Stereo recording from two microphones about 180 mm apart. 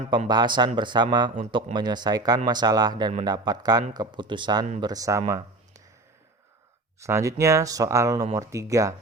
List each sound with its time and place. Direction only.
0.3 s speech: 25° right (ahead or behind)
7.0 s speech: 15° right (ahead or behind)